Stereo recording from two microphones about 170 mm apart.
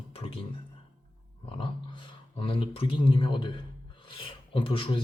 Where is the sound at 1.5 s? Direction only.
30° left (ahead or behind).